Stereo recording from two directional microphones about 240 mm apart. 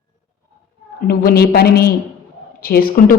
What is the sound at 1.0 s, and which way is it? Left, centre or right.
A woman's voice, left.